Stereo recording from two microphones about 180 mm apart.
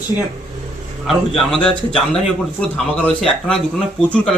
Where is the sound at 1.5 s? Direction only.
5° left (ahead or behind).